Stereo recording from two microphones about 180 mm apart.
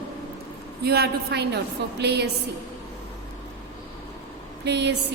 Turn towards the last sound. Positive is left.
turn(degrees=-70)  # may be behind; listen again after turning